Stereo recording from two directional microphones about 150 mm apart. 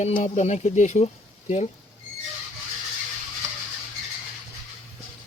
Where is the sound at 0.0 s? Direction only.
50° left (ahead or behind).